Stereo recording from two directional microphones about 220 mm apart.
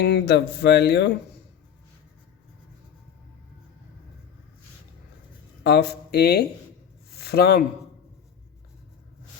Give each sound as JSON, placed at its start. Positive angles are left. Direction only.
{"t": 0.0, "sound": "speech", "side_deg": 50}
{"t": 5.6, "sound": "speech", "side_deg": 50}